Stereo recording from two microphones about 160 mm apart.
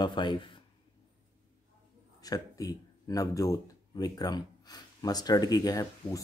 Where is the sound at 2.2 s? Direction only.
25° left (ahead or behind).